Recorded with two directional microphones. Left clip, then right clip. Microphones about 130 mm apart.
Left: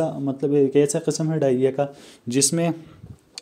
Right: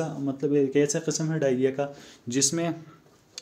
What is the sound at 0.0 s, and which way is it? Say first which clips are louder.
Speech: left 5 dB; 50° left (ahead or behind).